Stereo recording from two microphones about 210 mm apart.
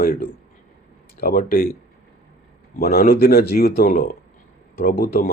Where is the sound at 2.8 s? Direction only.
45° left (ahead or behind).